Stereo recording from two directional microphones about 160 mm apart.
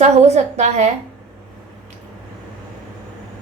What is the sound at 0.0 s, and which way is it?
Speech, 45° right (ahead or behind).